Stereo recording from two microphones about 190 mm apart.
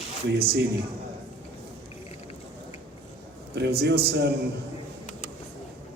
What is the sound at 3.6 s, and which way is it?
Speech, 60° right (ahead or behind).